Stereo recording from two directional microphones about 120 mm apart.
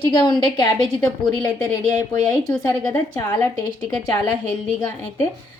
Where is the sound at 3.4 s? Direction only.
20° left (ahead or behind).